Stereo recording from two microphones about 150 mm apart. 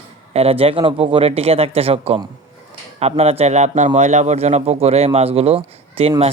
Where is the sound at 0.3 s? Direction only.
40° right (ahead or behind).